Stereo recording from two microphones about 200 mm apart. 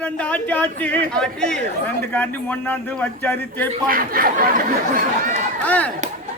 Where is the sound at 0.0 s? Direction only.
5° left (ahead or behind).